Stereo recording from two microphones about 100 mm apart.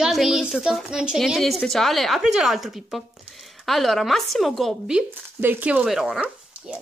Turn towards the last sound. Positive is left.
turn(degrees=0)  # may be behind; listen again after turning